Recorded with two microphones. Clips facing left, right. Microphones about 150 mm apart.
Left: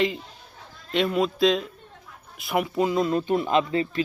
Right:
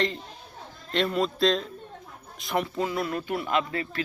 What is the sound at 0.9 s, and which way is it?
A man's voice, 5° left (ahead or behind).